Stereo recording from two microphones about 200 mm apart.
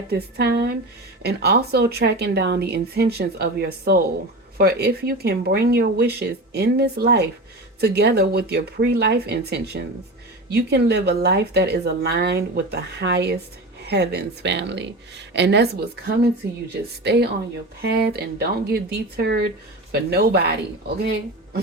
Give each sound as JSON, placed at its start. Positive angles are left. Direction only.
{"t": 0.1, "sound": "a woman's voice", "side_deg": -55}